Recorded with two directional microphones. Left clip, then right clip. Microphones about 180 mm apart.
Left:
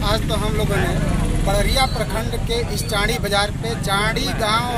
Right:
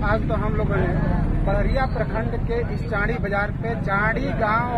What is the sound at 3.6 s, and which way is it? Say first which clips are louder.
Speech: left 2 dB; 30° left (ahead or behind).